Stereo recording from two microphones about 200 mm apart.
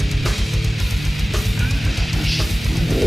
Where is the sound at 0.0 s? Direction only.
Centre (ahead or behind).